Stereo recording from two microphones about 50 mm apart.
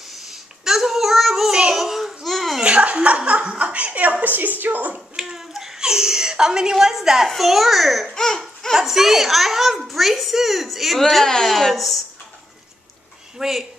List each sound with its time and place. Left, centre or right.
0.3 s child singing: centre
1.5 s a sound: centre
2.6 s a woman's voice: right
4.9 s speech: centre
8.1 s laughter: centre
8.7 s a child's voice: centre
11.2 s a child's voice: centre
13.4 s speech: centre